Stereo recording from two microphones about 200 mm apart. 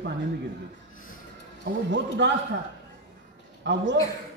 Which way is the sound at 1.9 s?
60° right (ahead or behind).